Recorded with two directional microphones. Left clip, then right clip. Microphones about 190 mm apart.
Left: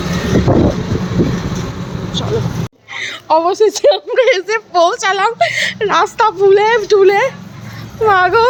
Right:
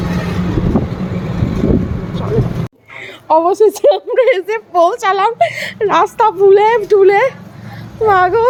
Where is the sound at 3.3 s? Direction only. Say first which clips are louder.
Right 1 dB; 25° right (ahead or behind).